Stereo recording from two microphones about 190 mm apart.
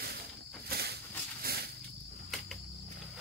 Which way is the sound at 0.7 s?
55° right (ahead or behind).